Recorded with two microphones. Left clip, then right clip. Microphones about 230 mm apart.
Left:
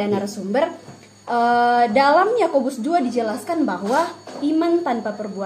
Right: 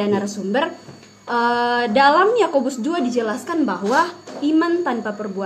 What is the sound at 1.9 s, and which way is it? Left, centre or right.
A woman's voice, centre.